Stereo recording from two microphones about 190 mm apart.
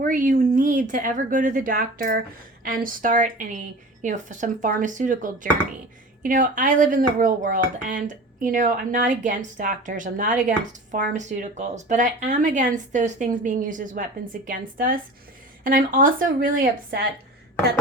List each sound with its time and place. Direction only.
0.0 s speech: 45° right (ahead or behind)